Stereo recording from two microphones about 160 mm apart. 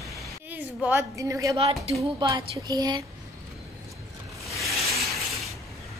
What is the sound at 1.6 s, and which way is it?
Speech, 35° right (ahead or behind).